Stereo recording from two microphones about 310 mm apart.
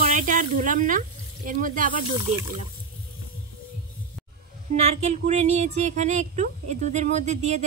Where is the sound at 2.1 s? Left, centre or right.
Centre.